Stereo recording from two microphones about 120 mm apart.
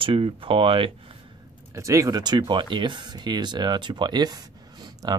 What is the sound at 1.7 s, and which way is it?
Speech, 25° right (ahead or behind).